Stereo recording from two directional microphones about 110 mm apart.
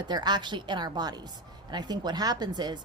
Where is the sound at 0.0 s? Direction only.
40° right (ahead or behind).